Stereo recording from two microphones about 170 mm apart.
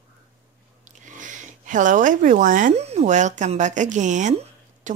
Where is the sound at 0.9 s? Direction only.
50° right (ahead or behind).